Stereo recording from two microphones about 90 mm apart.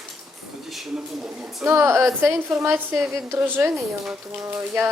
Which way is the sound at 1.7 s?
30° right (ahead or behind).